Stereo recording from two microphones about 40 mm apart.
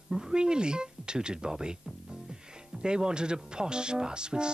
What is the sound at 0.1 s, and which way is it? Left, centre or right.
Speech, centre.